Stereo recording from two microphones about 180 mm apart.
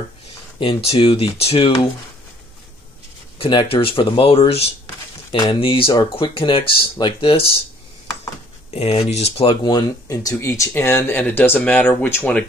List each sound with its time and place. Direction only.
0.8 s speech: 30° left (ahead or behind)
3.3 s speech: 30° left (ahead or behind)
8.7 s speech: 35° left (ahead or behind); by 12.4 s 10° left (ahead or behind)